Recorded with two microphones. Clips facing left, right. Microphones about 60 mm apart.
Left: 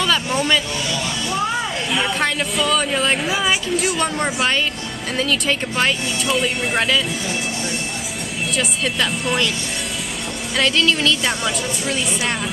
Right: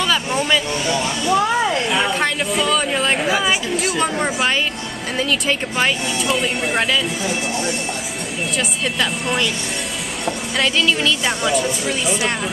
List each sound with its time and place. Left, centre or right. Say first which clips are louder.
0.0 s speech: even; centre
0.8 s speech: right 4 dB; right
1.9 s speech: right 1 dB; centre
8.5 s speech: left 1 dB; centre
10.6 s speech: left 1 dB; centre